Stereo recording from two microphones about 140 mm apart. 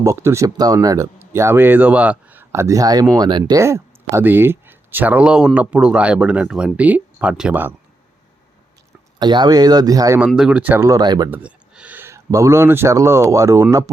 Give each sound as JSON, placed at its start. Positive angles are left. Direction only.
{"t": 0.0, "sound": "speech", "side_deg": -20}
{"t": 9.1, "sound": "speech", "side_deg": -30}
{"t": 10.2, "sound": "speech", "side_deg": -5}
{"t": 11.3, "sound": "speech", "side_deg": -10}